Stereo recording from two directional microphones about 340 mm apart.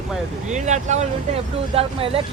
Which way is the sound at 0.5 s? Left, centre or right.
Right.